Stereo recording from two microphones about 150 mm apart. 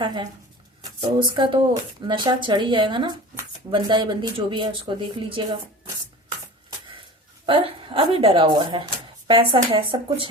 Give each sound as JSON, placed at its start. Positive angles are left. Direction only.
{"t": 0.0, "sound": "speech", "side_deg": -30}
{"t": 7.4, "sound": "speech", "side_deg": -35}